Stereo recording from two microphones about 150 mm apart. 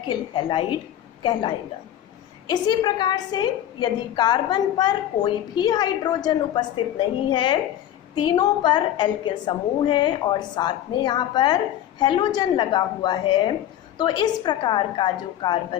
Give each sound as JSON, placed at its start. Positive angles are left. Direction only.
{"t": 0.1, "sound": "a woman's voice", "side_deg": 30}